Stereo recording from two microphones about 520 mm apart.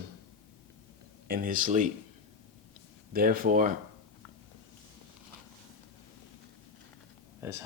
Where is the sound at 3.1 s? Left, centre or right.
Centre.